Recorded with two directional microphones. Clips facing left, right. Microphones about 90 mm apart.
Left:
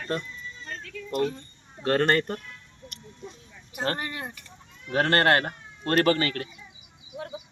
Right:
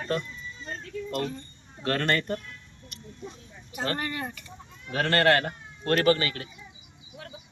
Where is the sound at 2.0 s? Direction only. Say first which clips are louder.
Left 3 dB; 50° left (ahead or behind).